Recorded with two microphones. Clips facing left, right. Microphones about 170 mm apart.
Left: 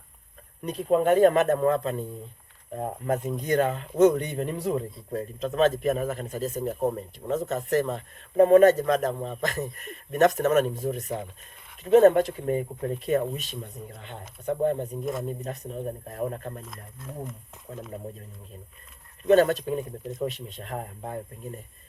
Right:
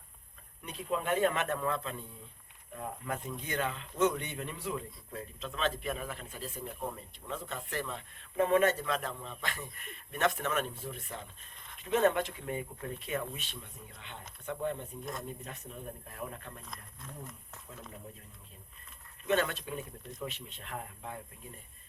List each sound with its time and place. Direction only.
0.6 s speech: 40° left (ahead or behind)
16.6 s speech: centre (ahead or behind)
19.3 s speech: 40° left (ahead or behind)